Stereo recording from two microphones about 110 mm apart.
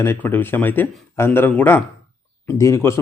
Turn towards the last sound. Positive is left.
turn(degrees=25)  # may be behind; listen again after turning